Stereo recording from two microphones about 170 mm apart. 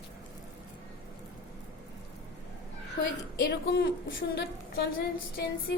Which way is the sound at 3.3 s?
70° left (ahead or behind).